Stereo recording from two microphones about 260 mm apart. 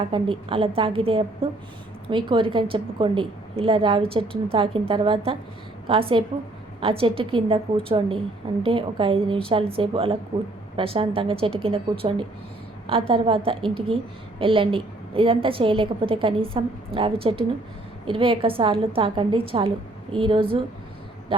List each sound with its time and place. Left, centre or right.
0.1 s a woman's voice: centre